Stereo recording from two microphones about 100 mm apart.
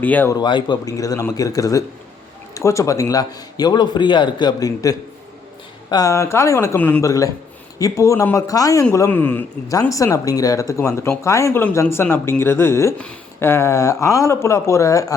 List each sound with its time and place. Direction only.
0.0 s speech: 15° left (ahead or behind)
0.3 s speech: 50° left (ahead or behind)
0.9 s a man's voice: 35° left (ahead or behind)
6.7 s speech: 15° left (ahead or behind)
7.0 s a man's voice: 35° left (ahead or behind)
9.0 s speech: 20° left (ahead or behind)
9.9 s a man's voice: 35° left (ahead or behind)